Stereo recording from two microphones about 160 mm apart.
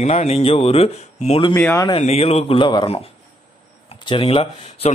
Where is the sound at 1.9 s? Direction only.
40° left (ahead or behind).